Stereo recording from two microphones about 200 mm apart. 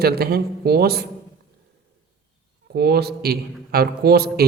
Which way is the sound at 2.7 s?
50° right (ahead or behind).